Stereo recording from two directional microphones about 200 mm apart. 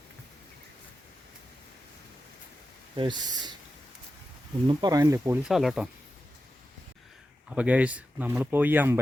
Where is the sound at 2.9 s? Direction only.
25° right (ahead or behind).